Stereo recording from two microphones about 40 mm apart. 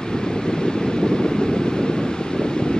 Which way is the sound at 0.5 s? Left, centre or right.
Centre.